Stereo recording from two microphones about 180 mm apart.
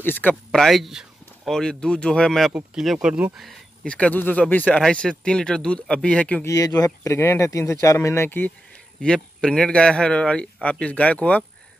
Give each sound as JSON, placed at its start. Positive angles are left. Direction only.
{"t": 0.0, "sound": "speech", "side_deg": 10}
{"t": 6.5, "sound": "speech", "side_deg": 20}